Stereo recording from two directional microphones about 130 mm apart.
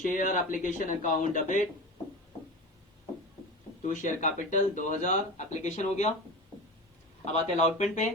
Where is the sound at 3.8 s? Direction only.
75° left (ahead or behind).